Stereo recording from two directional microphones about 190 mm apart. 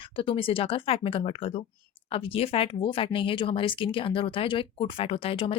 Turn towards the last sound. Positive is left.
turn(degrees=30)  # may be behind; listen again after turning